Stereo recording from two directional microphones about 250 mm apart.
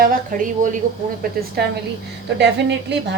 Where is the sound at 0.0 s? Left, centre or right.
Right.